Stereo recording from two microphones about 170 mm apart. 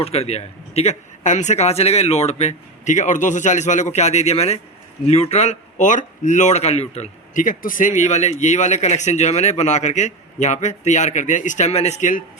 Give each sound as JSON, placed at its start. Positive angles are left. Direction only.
{"t": 0.0, "sound": "a man's voice", "side_deg": 40}